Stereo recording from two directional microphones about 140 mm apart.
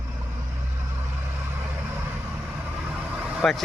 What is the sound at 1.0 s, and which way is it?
Vehicle, 15° right (ahead or behind).